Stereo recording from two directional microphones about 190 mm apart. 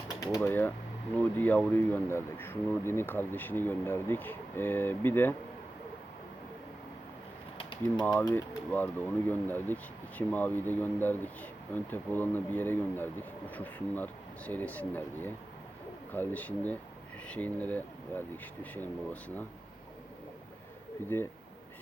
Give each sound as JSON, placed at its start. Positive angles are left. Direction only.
{"t": 0.2, "sound": "speech", "side_deg": 20}
{"t": 7.6, "sound": "a sound", "side_deg": 25}
{"t": 8.2, "sound": "speech", "side_deg": 10}
{"t": 21.1, "sound": "speech", "side_deg": 10}